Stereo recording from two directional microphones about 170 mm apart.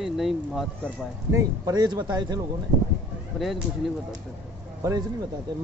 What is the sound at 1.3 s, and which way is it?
Speech, 25° right (ahead or behind).